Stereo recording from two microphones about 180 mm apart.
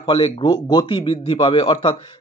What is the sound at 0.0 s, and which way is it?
A man's voice, 25° left (ahead or behind).